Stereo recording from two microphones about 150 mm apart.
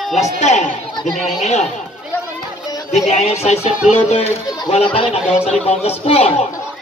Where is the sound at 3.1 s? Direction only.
45° left (ahead or behind).